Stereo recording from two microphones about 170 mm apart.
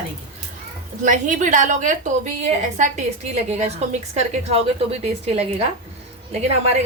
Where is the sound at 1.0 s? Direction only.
50° right (ahead or behind).